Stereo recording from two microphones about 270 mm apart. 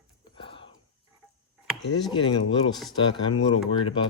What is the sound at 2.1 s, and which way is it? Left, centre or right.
Speech, centre.